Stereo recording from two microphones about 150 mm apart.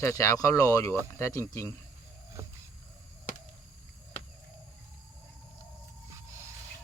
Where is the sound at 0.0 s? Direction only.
20° left (ahead or behind).